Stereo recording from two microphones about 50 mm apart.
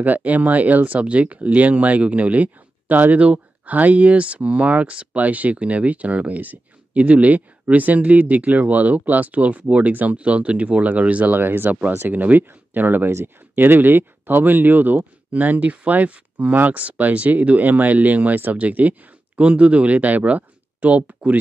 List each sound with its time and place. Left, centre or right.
0.0 s speech: right
11.3 s speech: right